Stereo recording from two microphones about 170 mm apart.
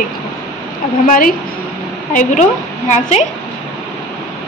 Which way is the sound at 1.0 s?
50° left (ahead or behind).